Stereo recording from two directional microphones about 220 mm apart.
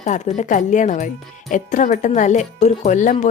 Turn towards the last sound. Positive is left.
turn(degrees=35)  # may be behind; listen again after turning